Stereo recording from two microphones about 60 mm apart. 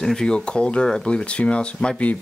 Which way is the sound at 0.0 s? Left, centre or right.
Centre.